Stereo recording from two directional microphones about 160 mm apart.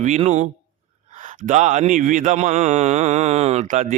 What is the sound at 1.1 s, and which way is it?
Speech, 55° right (ahead or behind).